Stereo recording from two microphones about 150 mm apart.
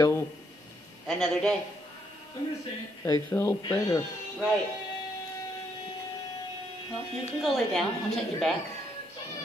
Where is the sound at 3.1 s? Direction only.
15° left (ahead or behind).